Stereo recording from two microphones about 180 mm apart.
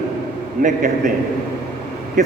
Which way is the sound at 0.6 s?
45° right (ahead or behind).